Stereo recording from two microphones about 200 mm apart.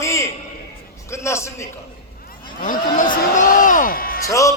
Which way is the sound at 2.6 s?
40° left (ahead or behind).